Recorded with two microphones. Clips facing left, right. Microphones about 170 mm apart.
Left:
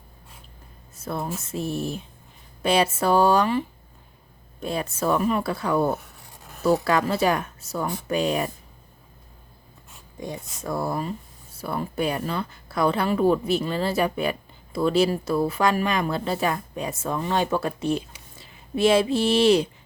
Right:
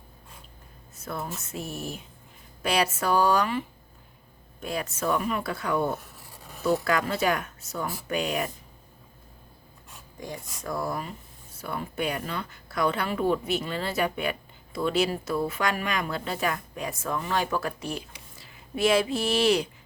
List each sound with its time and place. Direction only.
0.9 s speech: 30° left (ahead or behind)
4.6 s a woman's voice: 30° left (ahead or behind)
6.0 s writing: centre (ahead or behind)
6.8 s a woman's voice: 30° left (ahead or behind)
10.2 s a woman's voice: 25° left (ahead or behind)